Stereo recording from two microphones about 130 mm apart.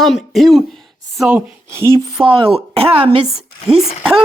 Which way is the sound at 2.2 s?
40° right (ahead or behind).